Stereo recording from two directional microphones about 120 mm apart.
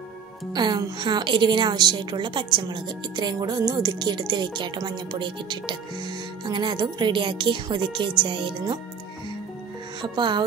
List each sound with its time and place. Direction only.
0.5 s a woman's voice: 35° right (ahead or behind)
10.0 s a woman's voice: 40° right (ahead or behind)